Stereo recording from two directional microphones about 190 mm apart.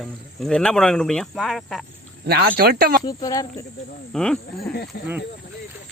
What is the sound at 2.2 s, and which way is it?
Speech, 55° right (ahead or behind).